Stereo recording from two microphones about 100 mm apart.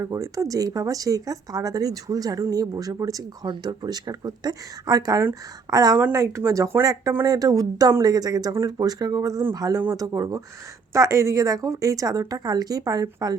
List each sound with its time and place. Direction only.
0.0 s speech: 35° right (ahead or behind)
3.4 s speech: 45° right (ahead or behind)